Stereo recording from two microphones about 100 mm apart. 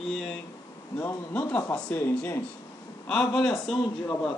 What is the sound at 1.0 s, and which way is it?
Speech, 20° left (ahead or behind).